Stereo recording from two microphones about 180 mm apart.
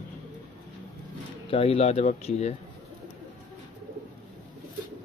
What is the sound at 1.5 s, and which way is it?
Speech, 30° left (ahead or behind).